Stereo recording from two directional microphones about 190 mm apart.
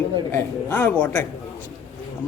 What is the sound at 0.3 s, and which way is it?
Speech, 10° left (ahead or behind).